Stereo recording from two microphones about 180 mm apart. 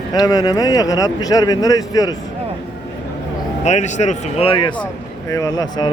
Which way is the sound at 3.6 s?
40° left (ahead or behind).